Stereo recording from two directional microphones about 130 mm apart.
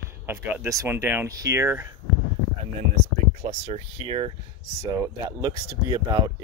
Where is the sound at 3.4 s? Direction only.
55° right (ahead or behind).